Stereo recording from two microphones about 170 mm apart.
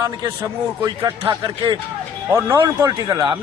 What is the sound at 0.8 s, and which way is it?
A man's voice, 20° right (ahead or behind).